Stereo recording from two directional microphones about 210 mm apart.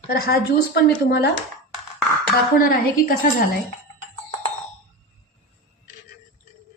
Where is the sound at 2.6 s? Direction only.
45° left (ahead or behind).